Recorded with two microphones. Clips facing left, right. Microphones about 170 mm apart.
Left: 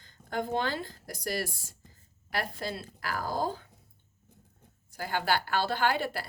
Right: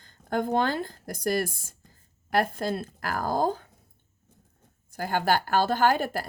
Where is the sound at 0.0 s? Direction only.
50° right (ahead or behind).